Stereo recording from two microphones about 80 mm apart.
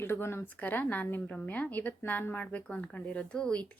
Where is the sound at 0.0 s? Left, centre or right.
Left.